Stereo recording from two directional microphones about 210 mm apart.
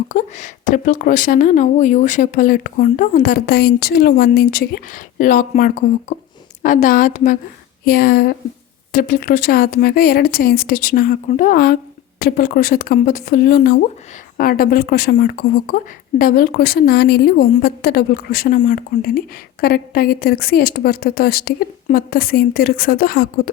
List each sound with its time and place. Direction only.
0.1 s a woman's voice: 35° left (ahead or behind)